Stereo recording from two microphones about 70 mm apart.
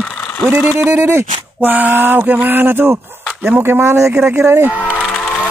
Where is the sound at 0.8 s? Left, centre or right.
Right.